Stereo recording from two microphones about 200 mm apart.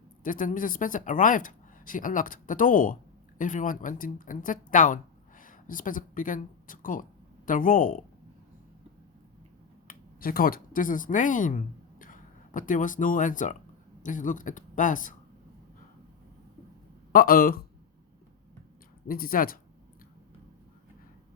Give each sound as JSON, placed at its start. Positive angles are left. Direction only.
{"t": 0.2, "sound": "speech", "side_deg": 40}
{"t": 9.8, "sound": "speech", "side_deg": 45}
{"t": 17.1, "sound": "speech", "side_deg": 45}
{"t": 19.0, "sound": "speech", "side_deg": 45}